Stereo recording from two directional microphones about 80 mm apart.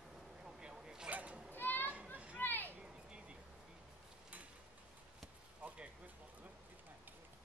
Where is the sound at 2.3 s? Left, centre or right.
Left.